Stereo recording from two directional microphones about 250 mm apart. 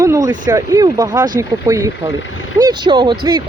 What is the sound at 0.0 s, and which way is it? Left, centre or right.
Speech, centre.